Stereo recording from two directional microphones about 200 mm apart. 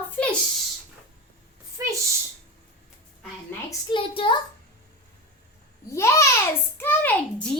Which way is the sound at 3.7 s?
25° left (ahead or behind).